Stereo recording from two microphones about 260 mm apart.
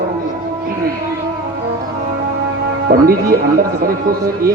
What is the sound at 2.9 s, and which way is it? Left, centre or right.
A man's voice, right.